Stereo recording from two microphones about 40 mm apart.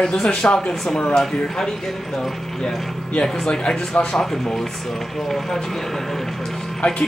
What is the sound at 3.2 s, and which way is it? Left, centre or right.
Speech, centre.